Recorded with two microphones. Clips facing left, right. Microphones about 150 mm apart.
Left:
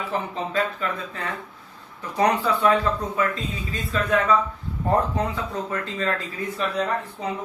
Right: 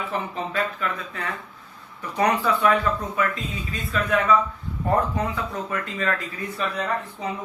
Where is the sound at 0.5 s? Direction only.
30° left (ahead or behind).